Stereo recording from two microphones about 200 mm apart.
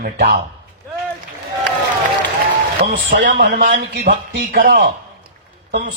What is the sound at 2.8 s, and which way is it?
A man's voice, 50° right (ahead or behind).